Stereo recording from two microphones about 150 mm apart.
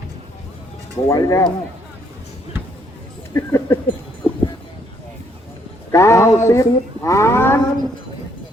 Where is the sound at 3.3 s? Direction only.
20° left (ahead or behind).